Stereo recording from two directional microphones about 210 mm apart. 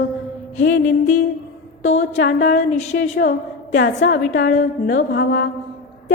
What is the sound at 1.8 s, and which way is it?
Speech, 35° left (ahead or behind).